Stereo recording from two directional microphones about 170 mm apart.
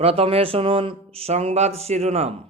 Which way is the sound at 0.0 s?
35° right (ahead or behind).